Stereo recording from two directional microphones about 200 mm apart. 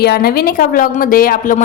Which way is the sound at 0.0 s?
50° left (ahead or behind).